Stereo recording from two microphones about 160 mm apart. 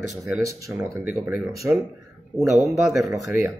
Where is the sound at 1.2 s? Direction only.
10° right (ahead or behind).